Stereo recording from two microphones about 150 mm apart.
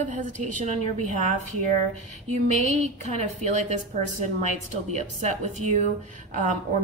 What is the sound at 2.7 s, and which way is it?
Speech, 50° right (ahead or behind).